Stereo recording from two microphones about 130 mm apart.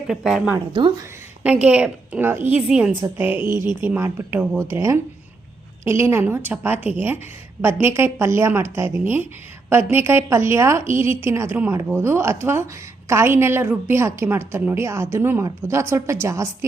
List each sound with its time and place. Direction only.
0.1 s speech: centre (ahead or behind)
0.7 s speech: 35° right (ahead or behind)
1.5 s a woman's voice: 10° right (ahead or behind)
2.6 s a woman's voice: 5° right (ahead or behind); by 16.6 s 20° right (ahead or behind)